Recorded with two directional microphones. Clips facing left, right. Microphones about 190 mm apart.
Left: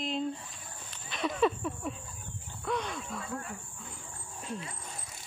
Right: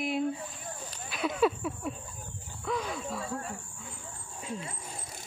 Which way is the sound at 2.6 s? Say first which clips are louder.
Right 1 dB; centre (ahead or behind).